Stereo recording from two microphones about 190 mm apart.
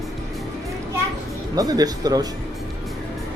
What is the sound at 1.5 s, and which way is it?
Speech, 20° right (ahead or behind).